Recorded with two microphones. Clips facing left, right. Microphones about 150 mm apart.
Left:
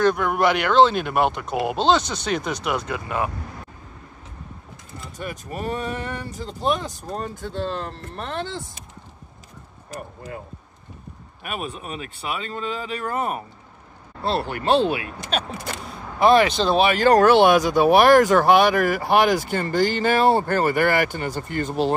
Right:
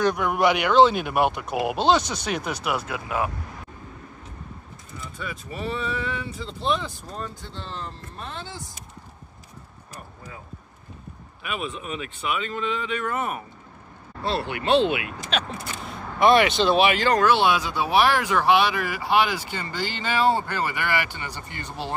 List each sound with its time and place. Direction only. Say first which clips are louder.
0.0 s speech: left 2 dB; 15° right (ahead or behind)
5.1 s speech: left 4 dB; 45° left (ahead or behind)
11.4 s speech: even; 45° left (ahead or behind)
14.5 s speech: even; 40° left (ahead or behind)